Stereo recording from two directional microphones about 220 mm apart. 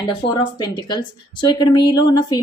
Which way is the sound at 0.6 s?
20° left (ahead or behind).